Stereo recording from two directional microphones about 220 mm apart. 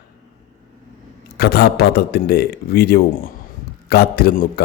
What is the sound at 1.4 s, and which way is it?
A man's voice, 45° left (ahead or behind).